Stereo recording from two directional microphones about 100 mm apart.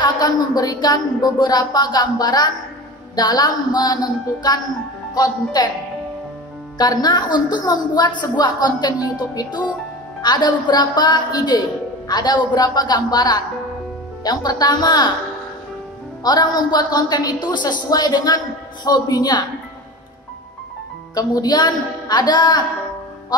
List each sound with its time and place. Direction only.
0.0 s a woman's voice: 45° left (ahead or behind)
6.8 s a woman's voice: 40° left (ahead or behind)
16.3 s a woman's voice: 45° left (ahead or behind)
21.1 s a woman's voice: 40° left (ahead or behind)